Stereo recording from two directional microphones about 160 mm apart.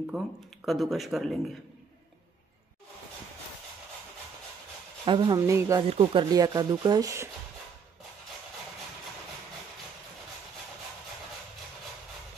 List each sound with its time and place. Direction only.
0.1 s speech: centre (ahead or behind)
5.0 s speech: 30° right (ahead or behind)
5.9 s speech: 35° right (ahead or behind)
6.3 s speech: 25° right (ahead or behind)